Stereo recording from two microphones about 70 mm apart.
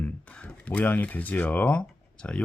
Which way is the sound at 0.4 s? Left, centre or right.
Left.